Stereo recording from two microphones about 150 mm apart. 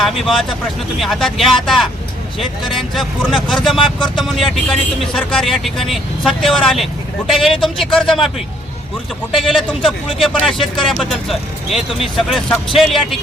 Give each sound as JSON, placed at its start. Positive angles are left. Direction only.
{"t": 0.0, "sound": "speech", "side_deg": 0}
{"t": 9.4, "sound": "speech", "side_deg": 0}